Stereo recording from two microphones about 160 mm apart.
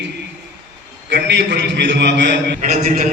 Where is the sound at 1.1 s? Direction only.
90° right.